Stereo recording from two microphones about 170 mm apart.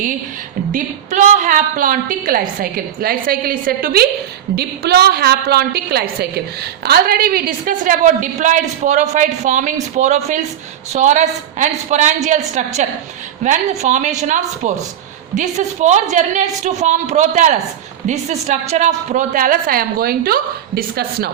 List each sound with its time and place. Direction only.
0.7 s a woman's voice: 45° right (ahead or behind)
4.5 s a woman's voice: 70° right (ahead or behind)